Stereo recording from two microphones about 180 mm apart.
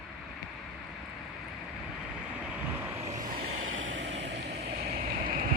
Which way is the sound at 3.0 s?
40° right (ahead or behind).